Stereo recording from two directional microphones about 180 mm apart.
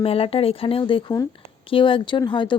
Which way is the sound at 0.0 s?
30° left (ahead or behind).